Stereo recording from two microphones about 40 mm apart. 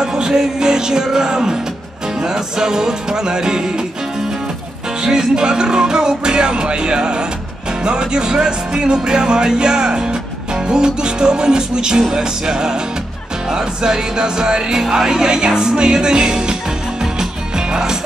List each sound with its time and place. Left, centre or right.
0.0 s music: centre
5.0 s music: centre